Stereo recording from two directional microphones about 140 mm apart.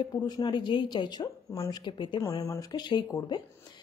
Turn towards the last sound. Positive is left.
turn(degrees=30)  # may be behind; listen again after turning